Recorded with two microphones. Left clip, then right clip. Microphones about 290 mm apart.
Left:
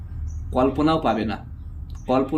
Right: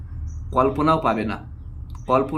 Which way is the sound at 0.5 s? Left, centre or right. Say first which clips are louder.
Right 2 dB; centre.